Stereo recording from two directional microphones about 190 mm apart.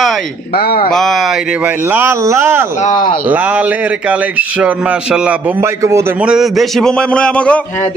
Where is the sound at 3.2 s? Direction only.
10° right (ahead or behind).